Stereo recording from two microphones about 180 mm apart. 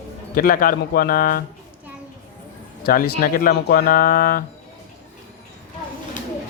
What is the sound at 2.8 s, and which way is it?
Speech, 55° left (ahead or behind).